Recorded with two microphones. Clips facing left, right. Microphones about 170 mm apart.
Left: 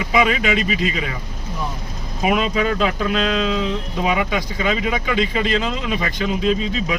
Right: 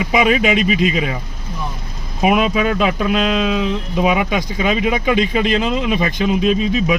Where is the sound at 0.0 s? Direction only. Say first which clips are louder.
Right 3 dB; 20° right (ahead or behind).